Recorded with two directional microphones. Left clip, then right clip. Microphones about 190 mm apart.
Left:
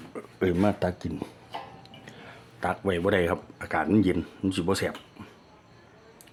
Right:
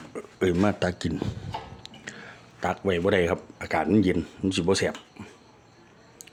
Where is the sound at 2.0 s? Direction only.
10° right (ahead or behind).